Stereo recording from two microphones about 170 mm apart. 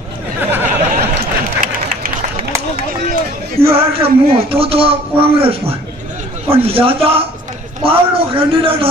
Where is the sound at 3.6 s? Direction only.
35° right (ahead or behind).